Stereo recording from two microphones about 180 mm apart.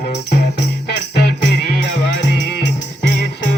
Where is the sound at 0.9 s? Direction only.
65° left (ahead or behind).